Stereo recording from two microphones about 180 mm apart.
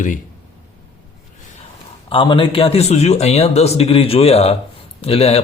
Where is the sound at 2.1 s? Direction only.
25° left (ahead or behind).